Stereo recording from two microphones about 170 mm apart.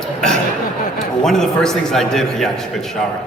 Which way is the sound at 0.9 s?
Centre (ahead or behind).